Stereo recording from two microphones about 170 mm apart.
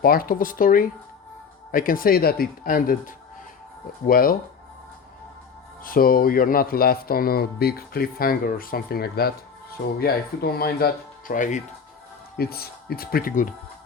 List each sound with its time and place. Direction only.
0.0 s speech: 60° left (ahead or behind)
5.8 s speech: 60° left (ahead or behind)
12.4 s speech: 65° left (ahead or behind)